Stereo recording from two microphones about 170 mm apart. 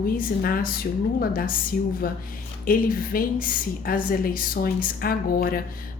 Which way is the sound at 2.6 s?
55° left (ahead or behind).